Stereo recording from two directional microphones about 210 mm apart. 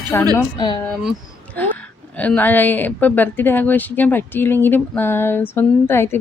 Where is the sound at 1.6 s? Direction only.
5° left (ahead or behind).